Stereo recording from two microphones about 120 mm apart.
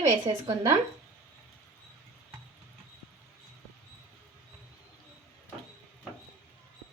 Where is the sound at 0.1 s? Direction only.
35° right (ahead or behind).